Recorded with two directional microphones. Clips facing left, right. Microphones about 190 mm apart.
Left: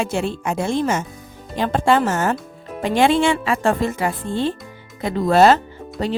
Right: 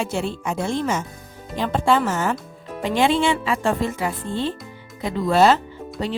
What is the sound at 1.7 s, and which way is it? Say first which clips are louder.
Speech: left 2 dB; 65° left (ahead or behind).